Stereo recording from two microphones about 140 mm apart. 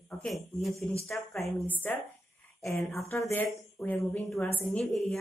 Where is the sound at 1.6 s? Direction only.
10° left (ahead or behind).